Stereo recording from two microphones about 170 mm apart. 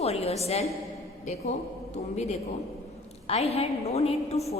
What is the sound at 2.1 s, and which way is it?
A woman's voice, 40° left (ahead or behind).